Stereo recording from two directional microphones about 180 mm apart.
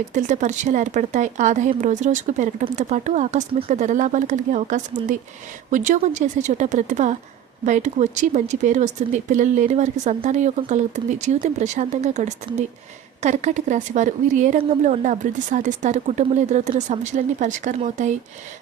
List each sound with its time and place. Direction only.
0.1 s speech: 40° right (ahead or behind)